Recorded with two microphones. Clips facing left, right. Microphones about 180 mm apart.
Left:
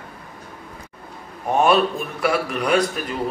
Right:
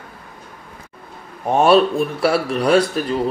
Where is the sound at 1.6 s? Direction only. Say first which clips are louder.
Right 5 dB; 30° right (ahead or behind).